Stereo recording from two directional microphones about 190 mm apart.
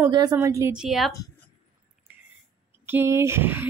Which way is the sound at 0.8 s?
Centre (ahead or behind).